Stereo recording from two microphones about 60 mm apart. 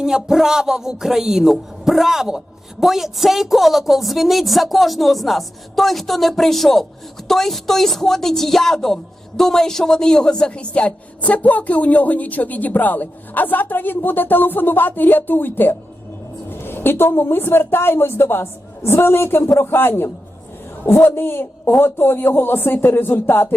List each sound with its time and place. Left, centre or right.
0.0 s a woman's voice: centre; by 15.7 s left
16.5 s a sound: left
17.1 s a woman's voice: left